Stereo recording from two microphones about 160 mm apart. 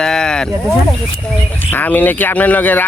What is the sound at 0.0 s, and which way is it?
Speech, 5° left (ahead or behind).